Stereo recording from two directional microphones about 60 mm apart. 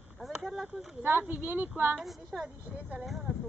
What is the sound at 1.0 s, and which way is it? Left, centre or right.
Speech, right.